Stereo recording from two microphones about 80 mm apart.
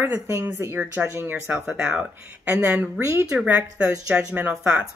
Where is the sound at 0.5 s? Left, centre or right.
Right.